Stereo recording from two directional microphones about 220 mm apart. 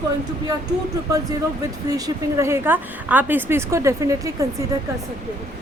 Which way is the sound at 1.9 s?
15° right (ahead or behind).